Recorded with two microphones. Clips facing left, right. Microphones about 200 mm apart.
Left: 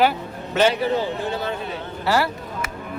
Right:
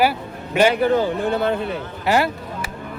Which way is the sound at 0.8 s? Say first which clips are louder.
Right 4 dB; 55° right (ahead or behind).